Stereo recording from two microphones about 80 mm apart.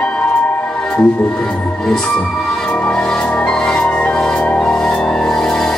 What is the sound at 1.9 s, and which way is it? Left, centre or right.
Music, centre.